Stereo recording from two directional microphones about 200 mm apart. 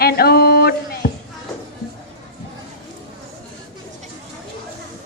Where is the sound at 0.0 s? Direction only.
50° left (ahead or behind).